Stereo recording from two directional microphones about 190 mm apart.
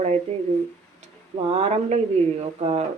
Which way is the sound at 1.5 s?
30° right (ahead or behind).